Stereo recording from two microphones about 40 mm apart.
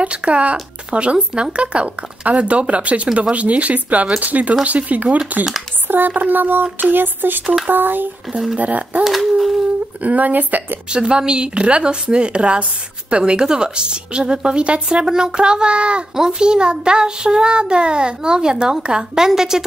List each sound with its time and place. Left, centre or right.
0.0 s speech: right
5.9 s speech: right
8.5 s speech: right
9.0 s speech: centre
10.0 s speech: right
10.9 s a child's voice: right